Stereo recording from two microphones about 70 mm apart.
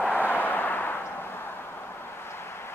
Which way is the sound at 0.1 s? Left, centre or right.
Left.